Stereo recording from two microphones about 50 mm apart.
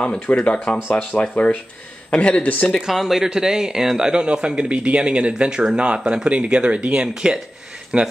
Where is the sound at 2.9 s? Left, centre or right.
Centre.